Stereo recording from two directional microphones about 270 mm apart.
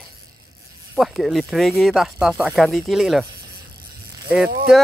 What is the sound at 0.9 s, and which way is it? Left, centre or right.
Speech, centre.